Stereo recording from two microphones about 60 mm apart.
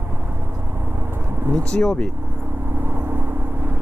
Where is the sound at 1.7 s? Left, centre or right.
Centre.